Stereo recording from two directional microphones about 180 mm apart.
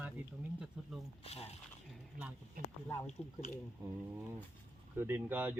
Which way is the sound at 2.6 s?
50° right (ahead or behind).